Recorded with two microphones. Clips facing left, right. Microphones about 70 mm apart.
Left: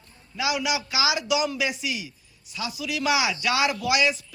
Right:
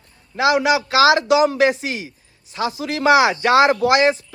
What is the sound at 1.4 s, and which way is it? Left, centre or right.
A man's voice, right.